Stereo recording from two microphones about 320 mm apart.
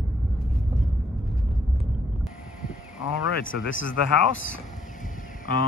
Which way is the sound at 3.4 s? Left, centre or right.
Left.